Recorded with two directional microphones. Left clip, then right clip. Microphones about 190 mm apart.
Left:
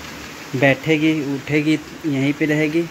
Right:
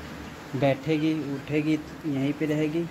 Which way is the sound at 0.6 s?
25° left (ahead or behind).